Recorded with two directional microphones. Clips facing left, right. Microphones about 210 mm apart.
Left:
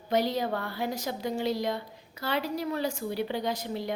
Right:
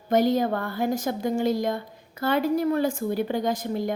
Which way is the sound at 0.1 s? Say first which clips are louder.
Right 6 dB; 50° right (ahead or behind).